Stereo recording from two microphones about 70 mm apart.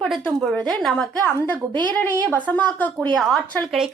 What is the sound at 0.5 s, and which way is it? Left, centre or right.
Speech, centre.